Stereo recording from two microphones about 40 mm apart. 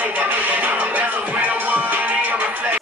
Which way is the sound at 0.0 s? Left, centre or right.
Right.